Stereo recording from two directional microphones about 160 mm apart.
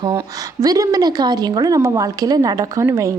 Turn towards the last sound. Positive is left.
turn(degrees=-20)  # may be behind; listen again after turning